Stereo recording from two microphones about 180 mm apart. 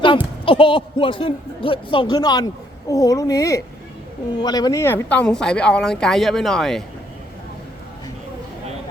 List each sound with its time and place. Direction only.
0.4 s a man's voice: 30° left (ahead or behind); by 6.8 s centre (ahead or behind)